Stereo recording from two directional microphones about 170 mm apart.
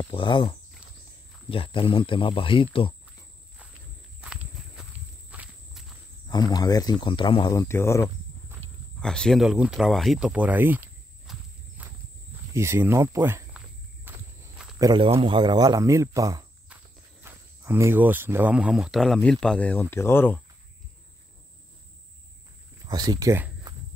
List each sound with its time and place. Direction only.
0.0 s speech: 30° left (ahead or behind)
4.2 s walk: centre (ahead or behind)
6.2 s speech: 25° left (ahead or behind)
9.0 s speech: 5° left (ahead or behind)
11.3 s walk: centre (ahead or behind)
12.5 s speech: 15° right (ahead or behind)
14.1 s walk: 10° right (ahead or behind)
14.8 s speech: 25° right (ahead or behind); by 20.4 s 10° left (ahead or behind)
22.8 s speech: 25° right (ahead or behind)